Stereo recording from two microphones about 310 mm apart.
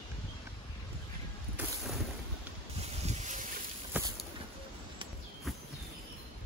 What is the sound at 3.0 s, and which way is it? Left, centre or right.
Boat, right.